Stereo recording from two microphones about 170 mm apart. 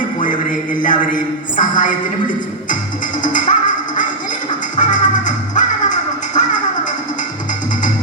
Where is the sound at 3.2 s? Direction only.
50° left (ahead or behind).